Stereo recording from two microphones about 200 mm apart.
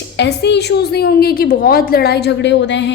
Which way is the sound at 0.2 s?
60° left (ahead or behind).